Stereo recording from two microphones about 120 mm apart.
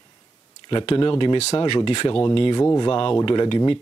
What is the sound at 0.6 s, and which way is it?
Speech, 40° left (ahead or behind).